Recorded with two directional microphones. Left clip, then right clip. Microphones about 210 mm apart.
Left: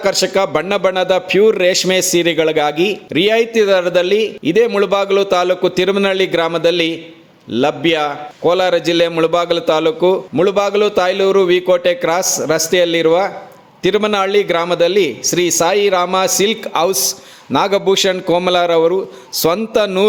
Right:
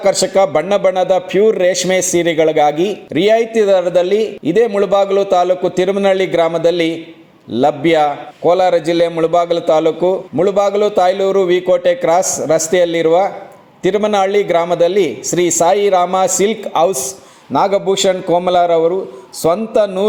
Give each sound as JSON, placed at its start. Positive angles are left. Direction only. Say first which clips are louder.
{"t": 0.0, "sound": "a man's voice", "louder": "right 2 dB", "side_deg": 15}